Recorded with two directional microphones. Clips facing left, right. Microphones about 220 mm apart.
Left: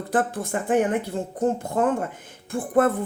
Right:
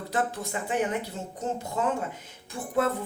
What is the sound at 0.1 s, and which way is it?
Speech, 50° left (ahead or behind).